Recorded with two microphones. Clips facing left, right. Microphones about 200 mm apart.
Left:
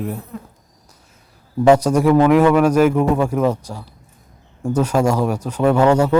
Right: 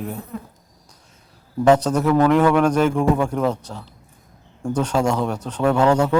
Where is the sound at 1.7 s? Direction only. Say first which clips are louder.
Left 3 dB; 10° left (ahead or behind).